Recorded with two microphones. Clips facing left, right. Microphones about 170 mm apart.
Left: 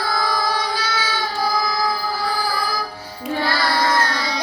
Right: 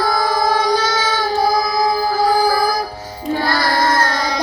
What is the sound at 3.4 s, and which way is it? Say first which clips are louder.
Carnatic music: right 3 dB; 45° right (ahead or behind).